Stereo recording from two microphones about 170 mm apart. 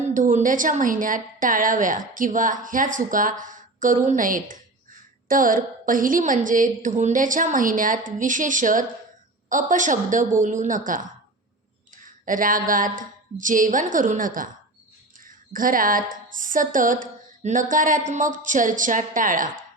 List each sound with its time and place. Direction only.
0.0 s a woman's voice: 50° right (ahead or behind)
12.2 s a woman's voice: 55° right (ahead or behind)